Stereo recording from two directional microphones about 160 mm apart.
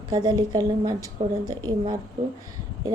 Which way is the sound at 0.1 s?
25° right (ahead or behind).